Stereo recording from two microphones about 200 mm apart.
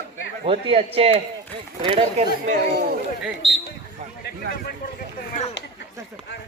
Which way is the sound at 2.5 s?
55° right (ahead or behind).